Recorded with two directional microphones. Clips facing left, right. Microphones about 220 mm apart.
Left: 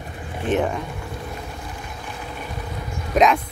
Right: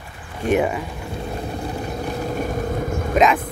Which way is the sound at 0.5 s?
10° right (ahead or behind).